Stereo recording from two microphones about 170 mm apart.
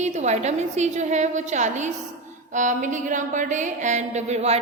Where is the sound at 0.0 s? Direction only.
40° right (ahead or behind).